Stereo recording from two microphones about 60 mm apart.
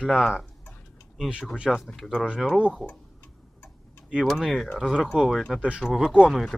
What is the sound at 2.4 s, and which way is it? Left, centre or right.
Speech, centre.